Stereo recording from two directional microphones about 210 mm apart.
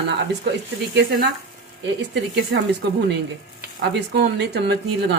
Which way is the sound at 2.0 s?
55° right (ahead or behind).